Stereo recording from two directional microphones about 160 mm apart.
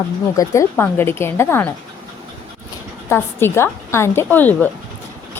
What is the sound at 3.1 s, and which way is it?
A woman's voice, 15° left (ahead or behind).